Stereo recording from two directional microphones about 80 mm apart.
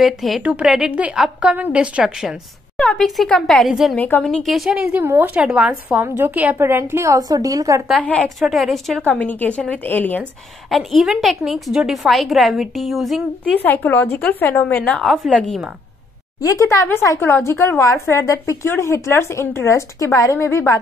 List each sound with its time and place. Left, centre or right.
0.0 s a woman's voice: centre
0.4 s a woman's voice: centre
2.8 s a woman's voice: centre
5.0 s speech: right
5.3 s a woman's voice: centre
6.0 s a woman's voice: right
7.2 s a woman's voice: right
8.2 s a woman's voice: centre
9.2 s a woman's voice: centre
10.7 s a woman's voice: centre
13.6 s a woman's voice: left
15.0 s a woman's voice: centre
16.3 s speech: left
17.2 s speech: left